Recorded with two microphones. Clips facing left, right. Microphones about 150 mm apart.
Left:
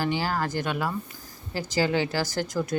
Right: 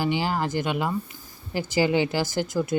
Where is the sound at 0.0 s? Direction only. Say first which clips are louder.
Right 2 dB; 15° right (ahead or behind).